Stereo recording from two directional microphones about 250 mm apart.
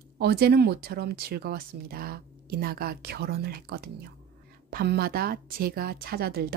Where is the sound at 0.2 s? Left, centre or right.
Right.